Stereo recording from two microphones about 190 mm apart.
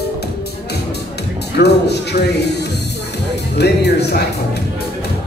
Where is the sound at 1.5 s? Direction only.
60° left (ahead or behind).